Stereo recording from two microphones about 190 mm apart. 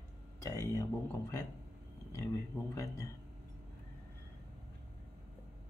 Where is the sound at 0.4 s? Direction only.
15° left (ahead or behind).